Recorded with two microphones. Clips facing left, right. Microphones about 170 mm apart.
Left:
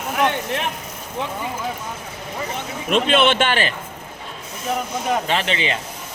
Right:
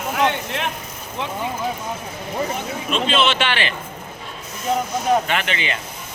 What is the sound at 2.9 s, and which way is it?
Speech, 55° left (ahead or behind).